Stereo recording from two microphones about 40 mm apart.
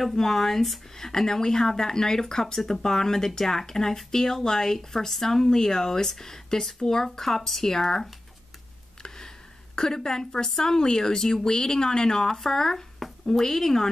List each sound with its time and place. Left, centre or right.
0.0 s speech: centre
9.0 s a sound: centre
9.8 s speech: centre